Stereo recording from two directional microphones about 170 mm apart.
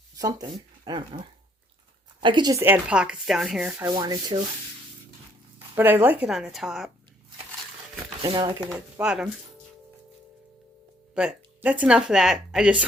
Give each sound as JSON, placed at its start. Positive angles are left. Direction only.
{"t": 0.2, "sound": "speech", "side_deg": -20}
{"t": 3.8, "sound": "speech", "side_deg": -25}
{"t": 5.7, "sound": "speech", "side_deg": -10}
{"t": 8.2, "sound": "speech", "side_deg": -25}
{"t": 9.0, "sound": "speech", "side_deg": -5}
{"t": 11.1, "sound": "a woman's voice", "side_deg": -5}